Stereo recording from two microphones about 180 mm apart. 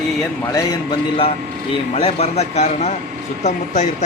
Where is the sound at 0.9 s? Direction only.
30° left (ahead or behind).